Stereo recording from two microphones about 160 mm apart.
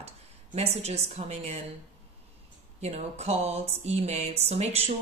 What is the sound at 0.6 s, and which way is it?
Speech, 40° right (ahead or behind).